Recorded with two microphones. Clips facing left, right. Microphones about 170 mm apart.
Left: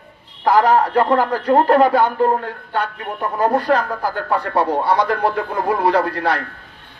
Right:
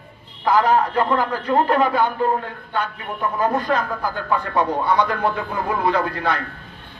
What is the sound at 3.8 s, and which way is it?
Speech, 35° left (ahead or behind).